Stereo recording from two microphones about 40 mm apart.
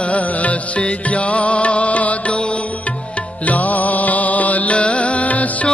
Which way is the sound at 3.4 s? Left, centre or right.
Left.